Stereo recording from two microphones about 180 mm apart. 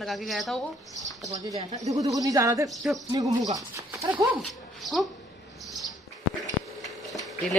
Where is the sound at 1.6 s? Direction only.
40° right (ahead or behind).